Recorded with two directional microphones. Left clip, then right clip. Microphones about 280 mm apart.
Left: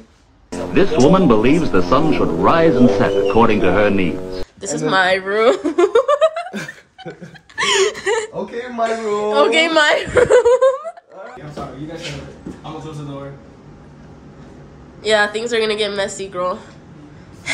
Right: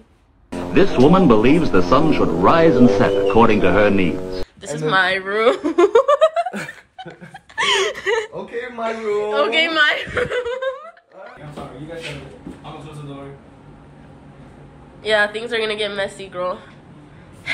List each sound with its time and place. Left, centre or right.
0.5 s speech: centre
4.6 s speech: centre
7.0 s a sound: centre
8.8 s speech: centre
15.0 s speech: centre